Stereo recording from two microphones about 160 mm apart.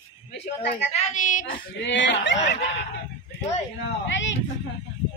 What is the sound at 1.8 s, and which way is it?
Speech, 90° left.